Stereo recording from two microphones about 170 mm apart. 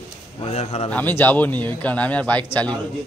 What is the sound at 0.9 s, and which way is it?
A man's voice, 10° left (ahead or behind).